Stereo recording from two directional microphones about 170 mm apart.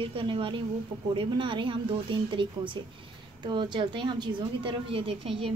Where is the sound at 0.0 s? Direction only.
30° right (ahead or behind).